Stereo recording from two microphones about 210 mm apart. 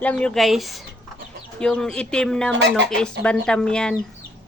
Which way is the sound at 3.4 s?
5° left (ahead or behind).